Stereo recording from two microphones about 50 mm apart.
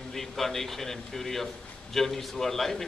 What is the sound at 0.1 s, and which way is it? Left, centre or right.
A man's voice, centre.